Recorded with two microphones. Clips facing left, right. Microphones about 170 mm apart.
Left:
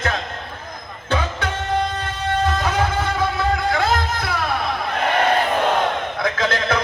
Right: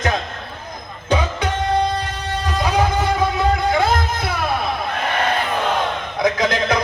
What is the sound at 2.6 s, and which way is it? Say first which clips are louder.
Guitar: right 3 dB; 10° right (ahead or behind).